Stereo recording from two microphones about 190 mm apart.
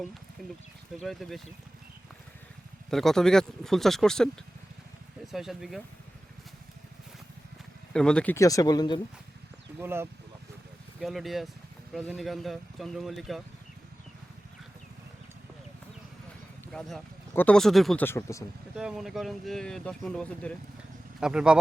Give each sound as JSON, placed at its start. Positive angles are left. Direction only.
{"t": 1.0, "sound": "speech", "side_deg": 0}
{"t": 2.9, "sound": "speech", "side_deg": 0}
{"t": 7.9, "sound": "speech", "side_deg": 5}
{"t": 9.8, "sound": "speech", "side_deg": -10}
{"t": 11.0, "sound": "speech", "side_deg": 0}
{"t": 16.7, "sound": "speech", "side_deg": 5}
{"t": 18.8, "sound": "speech", "side_deg": -5}